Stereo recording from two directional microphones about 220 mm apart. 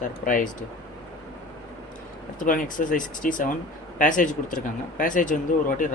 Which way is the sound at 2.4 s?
35° left (ahead or behind).